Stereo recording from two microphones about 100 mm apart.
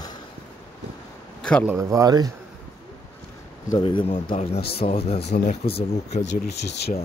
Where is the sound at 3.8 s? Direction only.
55° left (ahead or behind).